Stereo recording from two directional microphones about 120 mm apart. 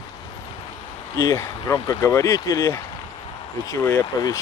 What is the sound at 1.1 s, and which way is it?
Speech, 25° left (ahead or behind).